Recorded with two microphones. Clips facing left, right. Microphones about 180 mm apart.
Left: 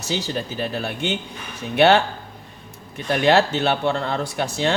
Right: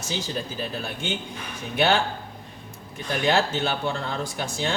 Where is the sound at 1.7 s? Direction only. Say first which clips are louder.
Left 7 dB; 70° left (ahead or behind).